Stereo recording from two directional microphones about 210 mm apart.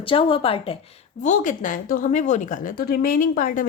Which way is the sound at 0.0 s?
25° left (ahead or behind).